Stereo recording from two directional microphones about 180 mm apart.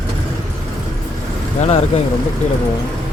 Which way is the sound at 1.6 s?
35° left (ahead or behind).